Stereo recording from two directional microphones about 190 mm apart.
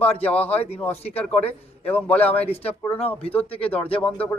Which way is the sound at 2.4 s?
30° left (ahead or behind).